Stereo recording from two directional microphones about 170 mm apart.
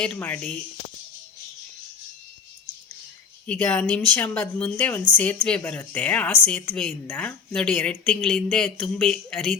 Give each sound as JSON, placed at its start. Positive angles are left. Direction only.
{"t": 0.0, "sound": "a woman's voice", "side_deg": 5}
{"t": 3.4, "sound": "a woman's voice", "side_deg": 5}